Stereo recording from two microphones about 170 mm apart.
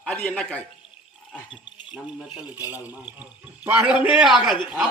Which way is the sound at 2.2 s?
5° right (ahead or behind).